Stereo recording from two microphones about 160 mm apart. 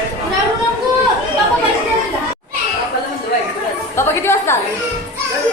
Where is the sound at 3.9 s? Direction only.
15° left (ahead or behind).